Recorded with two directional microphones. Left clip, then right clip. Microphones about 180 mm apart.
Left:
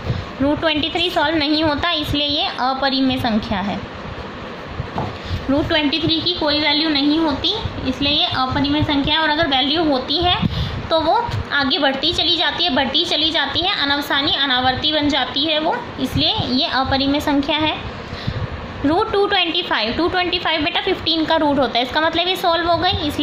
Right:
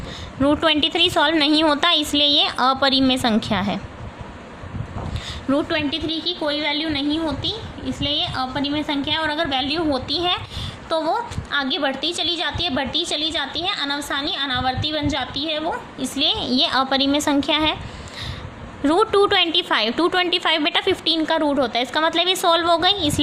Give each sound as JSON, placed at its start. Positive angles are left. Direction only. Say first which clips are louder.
{"t": 0.4, "sound": "a woman's voice", "louder": "right 1 dB", "side_deg": -45}
{"t": 5.5, "sound": "a woman's voice", "louder": "left 4 dB", "side_deg": -40}
{"t": 16.1, "sound": "a woman's voice", "louder": "left 1 dB", "side_deg": -45}
{"t": 18.9, "sound": "a woman's voice", "louder": "even", "side_deg": -45}